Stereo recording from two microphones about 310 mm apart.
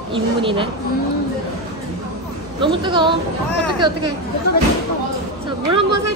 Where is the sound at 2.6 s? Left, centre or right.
Centre.